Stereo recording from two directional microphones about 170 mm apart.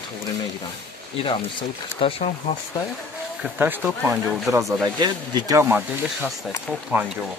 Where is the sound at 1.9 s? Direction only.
35° left (ahead or behind).